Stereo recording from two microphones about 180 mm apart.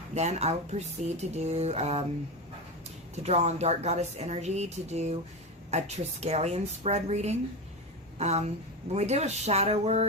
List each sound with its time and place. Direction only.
0.1 s speech: 40° right (ahead or behind)
3.2 s speech: 35° right (ahead or behind)